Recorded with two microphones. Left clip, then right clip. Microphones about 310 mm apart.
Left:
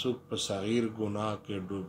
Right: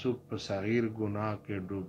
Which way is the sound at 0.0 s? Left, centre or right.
Left.